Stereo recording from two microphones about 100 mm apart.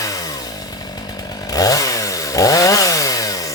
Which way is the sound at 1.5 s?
35° left (ahead or behind).